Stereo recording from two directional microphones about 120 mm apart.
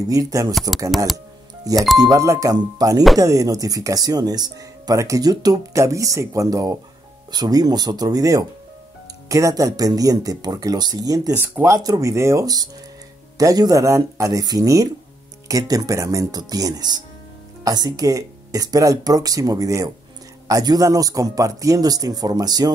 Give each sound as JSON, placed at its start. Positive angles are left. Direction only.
{"t": 0.1, "sound": "speech", "side_deg": -30}
{"t": 1.1, "sound": "music", "side_deg": -30}
{"t": 2.0, "sound": "a man's voice", "side_deg": -30}
{"t": 11.3, "sound": "a man's voice", "side_deg": -20}